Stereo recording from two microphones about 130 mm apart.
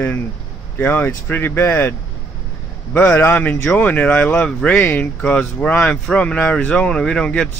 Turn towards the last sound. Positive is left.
turn(degrees=5)  # may be behind; listen again after turning